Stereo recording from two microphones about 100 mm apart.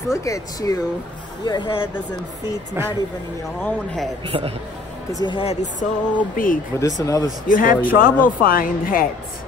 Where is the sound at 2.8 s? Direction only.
25° right (ahead or behind).